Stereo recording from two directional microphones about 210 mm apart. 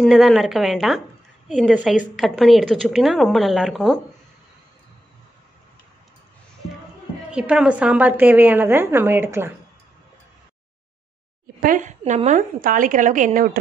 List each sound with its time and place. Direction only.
0.0 s a woman's voice: centre (ahead or behind)
7.2 s a woman's voice: 5° right (ahead or behind)
11.6 s a woman's voice: 40° right (ahead or behind)